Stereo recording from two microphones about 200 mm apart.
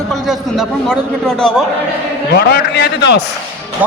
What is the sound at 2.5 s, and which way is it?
Speech, 55° left (ahead or behind).